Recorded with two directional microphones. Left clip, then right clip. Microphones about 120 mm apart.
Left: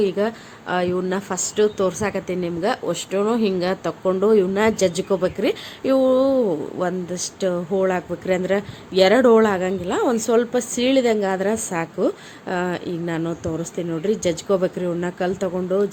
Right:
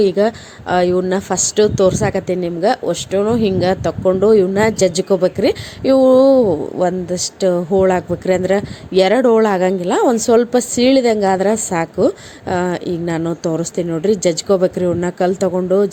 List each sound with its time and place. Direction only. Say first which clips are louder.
0.0 s a woman's voice: right 7 dB; 35° right (ahead or behind)